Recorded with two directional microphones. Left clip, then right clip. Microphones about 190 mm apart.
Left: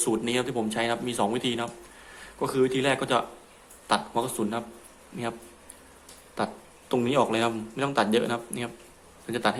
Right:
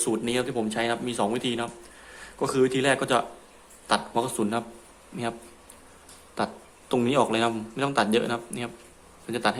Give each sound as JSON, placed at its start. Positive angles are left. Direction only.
{"t": 0.0, "sound": "a man's voice", "side_deg": 0}
{"t": 6.3, "sound": "a man's voice", "side_deg": -5}